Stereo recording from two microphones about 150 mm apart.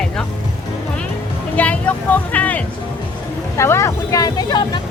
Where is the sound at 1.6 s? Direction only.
10° left (ahead or behind).